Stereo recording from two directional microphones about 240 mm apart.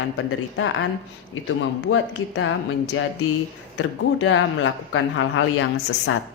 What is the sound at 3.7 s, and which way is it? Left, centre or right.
A woman's voice, left.